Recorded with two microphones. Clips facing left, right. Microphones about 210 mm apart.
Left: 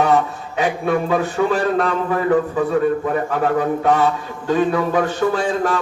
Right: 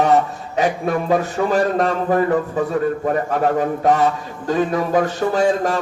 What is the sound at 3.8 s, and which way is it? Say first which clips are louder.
Mantra: even; 40° right (ahead or behind).